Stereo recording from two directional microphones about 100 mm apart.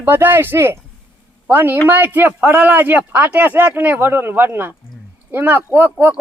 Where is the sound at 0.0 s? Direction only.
20° right (ahead or behind).